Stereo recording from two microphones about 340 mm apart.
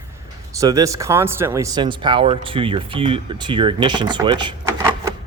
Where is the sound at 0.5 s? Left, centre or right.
Centre.